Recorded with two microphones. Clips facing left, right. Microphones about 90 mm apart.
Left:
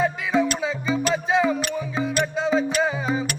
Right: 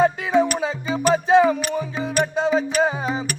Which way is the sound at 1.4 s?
50° right (ahead or behind).